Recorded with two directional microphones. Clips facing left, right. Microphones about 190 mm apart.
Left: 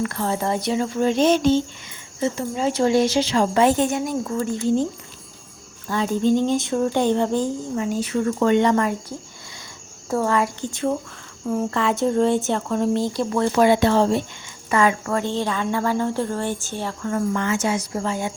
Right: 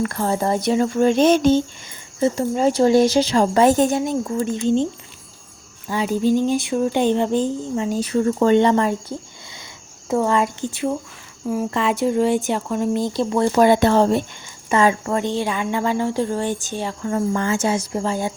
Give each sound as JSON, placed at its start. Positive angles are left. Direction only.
{"t": 0.0, "sound": "speech", "side_deg": -40}
{"t": 2.2, "sound": "a woman's voice", "side_deg": -40}
{"t": 5.9, "sound": "a woman's voice", "side_deg": -10}
{"t": 8.0, "sound": "a woman's voice", "side_deg": -30}
{"t": 10.1, "sound": "a woman's voice", "side_deg": -15}
{"t": 11.7, "sound": "a woman's voice", "side_deg": -15}
{"t": 13.1, "sound": "a woman's voice", "side_deg": -25}
{"t": 13.7, "sound": "speech", "side_deg": -45}
{"t": 14.7, "sound": "a woman's voice", "side_deg": -25}
{"t": 17.3, "sound": "a woman's voice", "side_deg": -35}